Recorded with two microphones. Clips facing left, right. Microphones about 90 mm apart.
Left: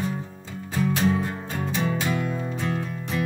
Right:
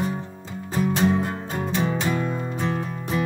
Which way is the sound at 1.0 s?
15° right (ahead or behind).